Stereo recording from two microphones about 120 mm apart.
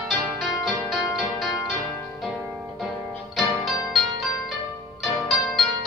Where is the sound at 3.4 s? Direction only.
5° right (ahead or behind).